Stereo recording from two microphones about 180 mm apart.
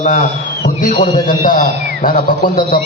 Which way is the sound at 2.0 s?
50° left (ahead or behind).